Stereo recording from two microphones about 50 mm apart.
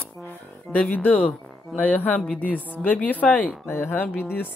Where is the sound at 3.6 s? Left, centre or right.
Left.